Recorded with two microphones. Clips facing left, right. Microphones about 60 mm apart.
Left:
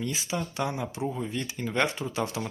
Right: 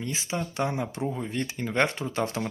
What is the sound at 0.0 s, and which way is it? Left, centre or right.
Speech, right.